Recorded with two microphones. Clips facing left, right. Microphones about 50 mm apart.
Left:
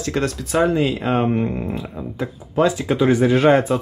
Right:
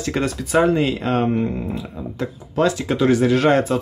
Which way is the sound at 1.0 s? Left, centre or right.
Centre.